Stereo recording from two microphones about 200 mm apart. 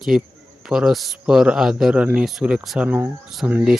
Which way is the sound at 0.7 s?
Centre (ahead or behind).